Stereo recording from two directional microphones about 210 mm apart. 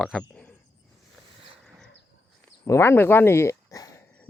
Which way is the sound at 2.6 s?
15° left (ahead or behind).